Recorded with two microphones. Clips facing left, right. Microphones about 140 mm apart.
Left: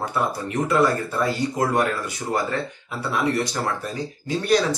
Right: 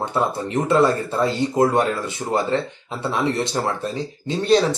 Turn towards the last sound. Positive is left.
turn(degrees=-25)  # may be behind; listen again after turning